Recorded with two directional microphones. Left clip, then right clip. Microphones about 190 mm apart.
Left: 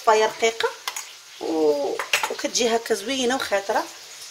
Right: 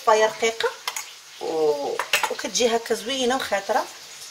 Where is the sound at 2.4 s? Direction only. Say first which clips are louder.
Even; 50° left (ahead or behind).